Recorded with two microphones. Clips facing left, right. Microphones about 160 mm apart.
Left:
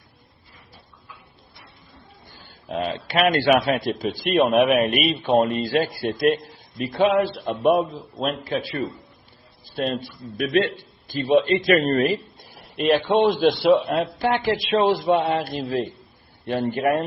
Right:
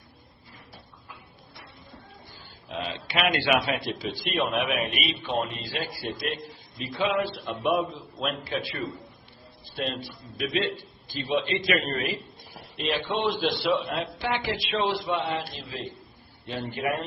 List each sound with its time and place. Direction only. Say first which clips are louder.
2.6 s a man's voice: left 7 dB; 45° left (ahead or behind)
7.4 s a man's voice: left 6 dB; 45° left (ahead or behind)
9.6 s a sound: left 6 dB; 45° left (ahead or behind)
10.3 s a man's voice: left 7 dB; 55° left (ahead or behind)